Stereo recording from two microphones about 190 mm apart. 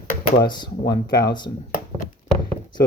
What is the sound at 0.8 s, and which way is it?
Speech, 60° left (ahead or behind).